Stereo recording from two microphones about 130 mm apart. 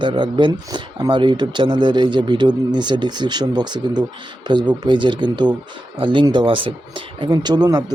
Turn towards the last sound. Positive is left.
turn(degrees=-30)  # may be behind; listen again after turning